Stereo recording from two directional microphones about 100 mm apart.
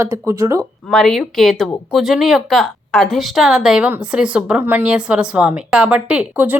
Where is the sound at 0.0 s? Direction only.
25° right (ahead or behind).